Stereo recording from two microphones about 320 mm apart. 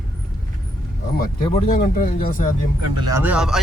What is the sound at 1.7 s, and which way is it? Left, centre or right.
Speech, left.